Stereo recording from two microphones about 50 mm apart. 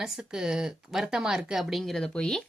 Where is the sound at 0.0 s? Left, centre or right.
Centre.